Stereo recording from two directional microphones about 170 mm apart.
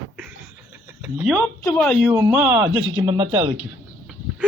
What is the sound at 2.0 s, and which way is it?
Speech, 10° right (ahead or behind).